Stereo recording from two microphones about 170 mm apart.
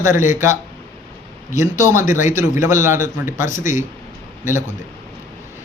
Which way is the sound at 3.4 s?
50° left (ahead or behind).